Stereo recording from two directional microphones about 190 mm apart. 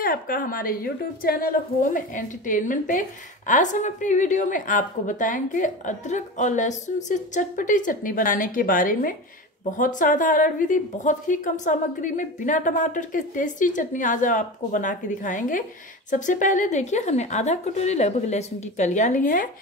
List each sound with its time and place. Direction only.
0.0 s a woman's voice: 45° left (ahead or behind)